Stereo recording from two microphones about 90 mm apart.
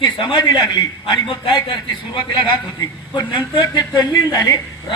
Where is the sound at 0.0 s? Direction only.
55° left (ahead or behind).